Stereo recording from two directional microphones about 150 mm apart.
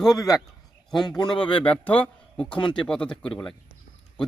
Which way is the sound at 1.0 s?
30° left (ahead or behind).